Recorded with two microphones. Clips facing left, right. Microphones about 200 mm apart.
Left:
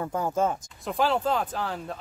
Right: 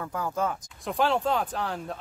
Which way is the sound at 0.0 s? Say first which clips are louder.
Left 3 dB; 25° left (ahead or behind).